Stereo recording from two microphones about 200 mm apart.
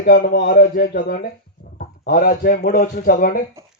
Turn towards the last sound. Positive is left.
turn(degrees=45)  # may be behind; listen again after turning